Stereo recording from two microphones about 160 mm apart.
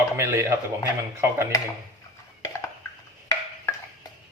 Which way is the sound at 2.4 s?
20° left (ahead or behind).